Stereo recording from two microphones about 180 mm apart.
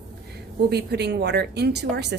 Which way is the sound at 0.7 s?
65° right (ahead or behind).